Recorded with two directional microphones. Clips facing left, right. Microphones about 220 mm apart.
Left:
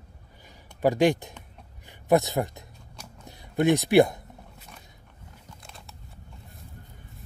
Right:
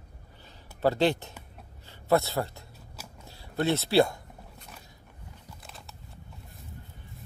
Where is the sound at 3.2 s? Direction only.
15° left (ahead or behind).